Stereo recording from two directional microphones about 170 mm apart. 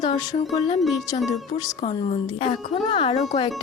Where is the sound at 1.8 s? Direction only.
40° left (ahead or behind).